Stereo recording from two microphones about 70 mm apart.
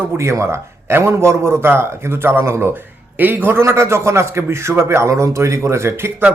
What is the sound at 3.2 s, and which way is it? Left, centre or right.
Speech, right.